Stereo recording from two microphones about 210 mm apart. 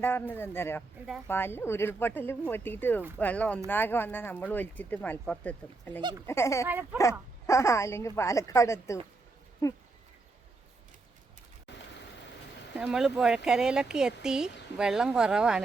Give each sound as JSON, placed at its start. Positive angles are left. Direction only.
{"t": 0.0, "sound": "speech", "side_deg": 10}
{"t": 1.0, "sound": "speech", "side_deg": -10}
{"t": 1.3, "sound": "speech", "side_deg": 10}
{"t": 6.0, "sound": "speech", "side_deg": -20}
{"t": 6.2, "sound": "speech", "side_deg": 10}
{"t": 6.7, "sound": "speech", "side_deg": -10}
{"t": 7.0, "sound": "speech", "side_deg": 15}
{"t": 12.7, "sound": "speech", "side_deg": -5}